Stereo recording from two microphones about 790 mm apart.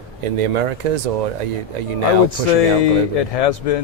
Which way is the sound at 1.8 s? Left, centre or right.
Right.